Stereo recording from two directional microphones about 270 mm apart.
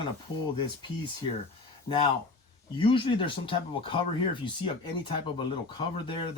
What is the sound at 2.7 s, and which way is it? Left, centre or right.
Speech, centre.